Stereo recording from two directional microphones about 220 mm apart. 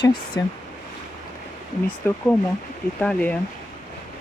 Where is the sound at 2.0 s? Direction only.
10° left (ahead or behind).